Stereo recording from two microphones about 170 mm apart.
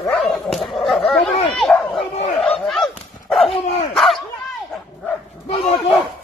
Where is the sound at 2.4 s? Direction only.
Centre (ahead or behind).